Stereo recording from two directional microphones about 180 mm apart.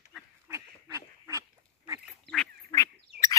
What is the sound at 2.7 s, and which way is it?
Bird, 15° left (ahead or behind).